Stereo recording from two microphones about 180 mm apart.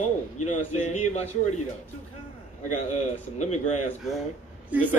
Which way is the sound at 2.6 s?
40° left (ahead or behind).